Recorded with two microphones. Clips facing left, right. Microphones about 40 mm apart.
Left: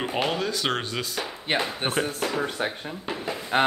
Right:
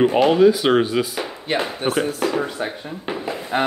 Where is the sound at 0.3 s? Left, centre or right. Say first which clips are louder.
Right 12 dB; centre.